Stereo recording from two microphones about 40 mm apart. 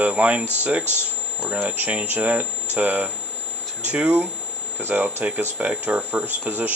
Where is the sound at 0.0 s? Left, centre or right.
Right.